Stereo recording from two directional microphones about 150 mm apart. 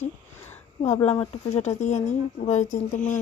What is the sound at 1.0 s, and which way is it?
Speech, 35° left (ahead or behind).